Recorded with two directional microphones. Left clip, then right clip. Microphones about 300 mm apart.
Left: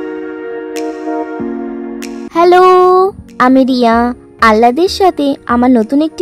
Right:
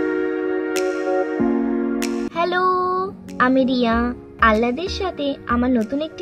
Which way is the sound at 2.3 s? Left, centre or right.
Left.